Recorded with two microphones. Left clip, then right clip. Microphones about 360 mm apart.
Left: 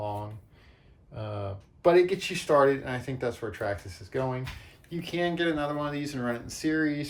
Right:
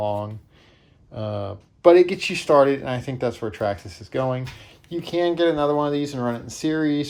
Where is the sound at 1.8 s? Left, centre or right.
Right.